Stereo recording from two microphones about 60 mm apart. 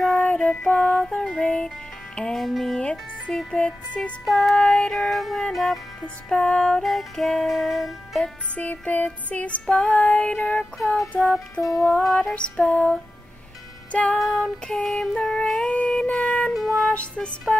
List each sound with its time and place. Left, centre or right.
0.1 s music: centre
2.8 s speech: centre
3.3 s music: centre
4.3 s music: centre
6.2 s music: centre
6.8 s music: centre
8.5 s female singing: left
11.0 s music: centre
12.4 s music: centre
14.1 s music: centre
15.6 s music: centre
16.9 s female singing: centre